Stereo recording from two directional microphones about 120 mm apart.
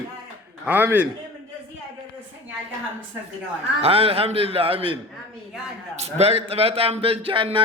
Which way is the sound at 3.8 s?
55° right (ahead or behind).